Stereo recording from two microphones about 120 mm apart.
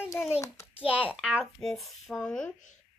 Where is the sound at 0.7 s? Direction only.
10° right (ahead or behind); by 2.4 s 5° left (ahead or behind).